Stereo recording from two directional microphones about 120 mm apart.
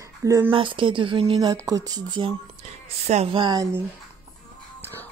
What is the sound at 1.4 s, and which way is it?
Mantra, 30° right (ahead or behind).